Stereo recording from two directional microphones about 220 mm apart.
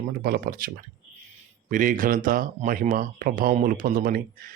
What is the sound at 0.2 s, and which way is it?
Speech, 40° right (ahead or behind).